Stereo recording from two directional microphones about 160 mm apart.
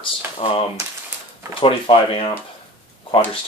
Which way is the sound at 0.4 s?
35° left (ahead or behind).